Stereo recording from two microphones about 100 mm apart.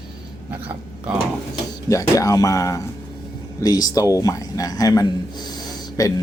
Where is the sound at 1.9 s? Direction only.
35° left (ahead or behind).